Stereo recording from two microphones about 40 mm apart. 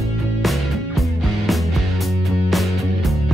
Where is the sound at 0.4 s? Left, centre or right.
Centre.